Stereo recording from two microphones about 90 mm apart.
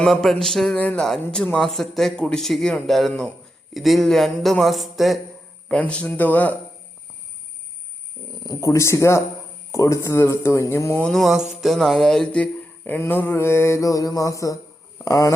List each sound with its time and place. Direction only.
0.0 s speech: 5° left (ahead or behind)
0.8 s speech: 15° left (ahead or behind)
1.5 s speech: 5° left (ahead or behind)
5.6 s speech: 15° left (ahead or behind)
8.4 s speech: 35° left (ahead or behind)
11.1 s speech: centre (ahead or behind); by 15.3 s 35° left (ahead or behind)